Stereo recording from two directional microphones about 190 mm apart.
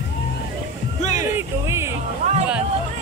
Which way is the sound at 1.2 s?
15° right (ahead or behind).